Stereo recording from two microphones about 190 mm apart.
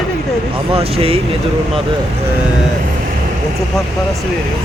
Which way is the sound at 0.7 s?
30° right (ahead or behind).